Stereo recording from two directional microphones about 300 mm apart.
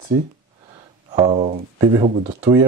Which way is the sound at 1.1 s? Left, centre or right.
Centre.